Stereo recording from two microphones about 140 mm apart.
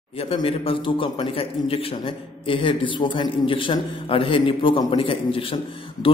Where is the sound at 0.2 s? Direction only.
40° left (ahead or behind).